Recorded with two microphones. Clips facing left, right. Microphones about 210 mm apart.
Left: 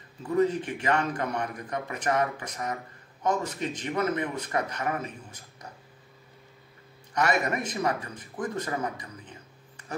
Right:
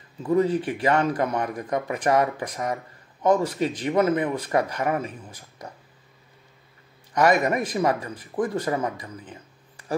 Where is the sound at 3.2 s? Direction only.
35° right (ahead or behind).